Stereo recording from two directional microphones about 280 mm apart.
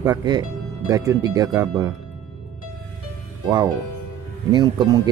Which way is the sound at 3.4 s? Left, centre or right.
Centre.